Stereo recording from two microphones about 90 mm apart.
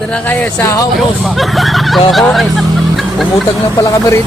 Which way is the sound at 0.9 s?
Centre (ahead or behind).